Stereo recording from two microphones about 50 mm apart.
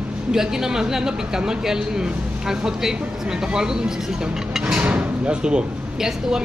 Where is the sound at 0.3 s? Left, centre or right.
Centre.